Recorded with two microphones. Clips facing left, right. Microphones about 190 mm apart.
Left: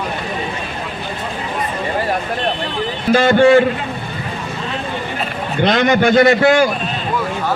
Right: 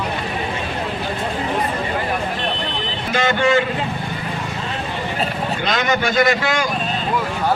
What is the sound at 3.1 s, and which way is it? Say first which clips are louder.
Speech: left 7 dB; 35° left (ahead or behind).